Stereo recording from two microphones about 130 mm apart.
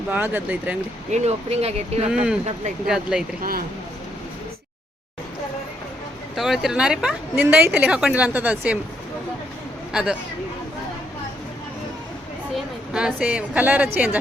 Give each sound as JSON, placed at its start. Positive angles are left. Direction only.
{"t": 0.1, "sound": "a woman's voice", "side_deg": -15}
{"t": 1.1, "sound": "speech", "side_deg": -55}
{"t": 2.0, "sound": "a woman's voice", "side_deg": -5}
{"t": 6.3, "sound": "a woman's voice", "side_deg": 0}
{"t": 9.9, "sound": "speech", "side_deg": -5}
{"t": 12.9, "sound": "a woman's voice", "side_deg": -5}